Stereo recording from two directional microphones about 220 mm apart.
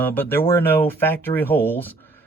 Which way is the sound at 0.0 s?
10° left (ahead or behind).